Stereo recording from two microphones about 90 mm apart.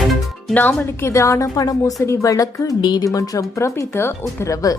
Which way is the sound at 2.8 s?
55° left (ahead or behind).